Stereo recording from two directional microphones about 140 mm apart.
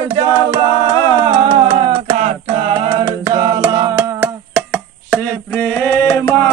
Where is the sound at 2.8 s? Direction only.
35° right (ahead or behind).